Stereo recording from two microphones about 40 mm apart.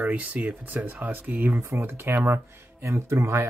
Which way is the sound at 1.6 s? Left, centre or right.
Right.